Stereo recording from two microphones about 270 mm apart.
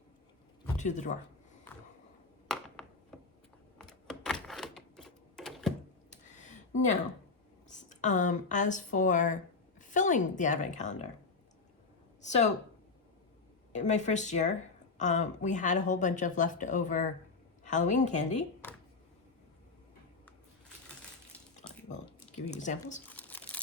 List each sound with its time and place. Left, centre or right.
0.8 s speech: left
2.5 s a sound: centre
3.8 s typewriter: centre
6.3 s a sound: left
7.7 s speech: left
12.2 s speech: left
13.7 s speech: left
22.4 s speech: left
23.0 s crumpling: centre